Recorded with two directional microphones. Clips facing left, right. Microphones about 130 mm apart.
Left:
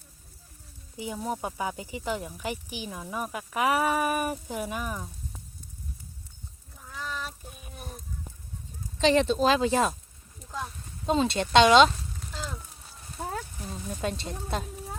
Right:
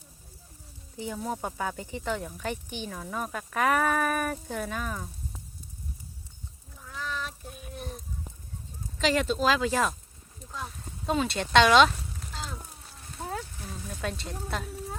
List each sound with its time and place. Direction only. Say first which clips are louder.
0.9 s speech: left 1 dB; 10° left (ahead or behind)
6.9 s a sound: right 1 dB; 5° left (ahead or behind)
9.0 s speech: left 4 dB; 25° left (ahead or behind)
11.0 s speech: left 3 dB; 25° left (ahead or behind)
13.6 s speech: left 3 dB; 20° left (ahead or behind)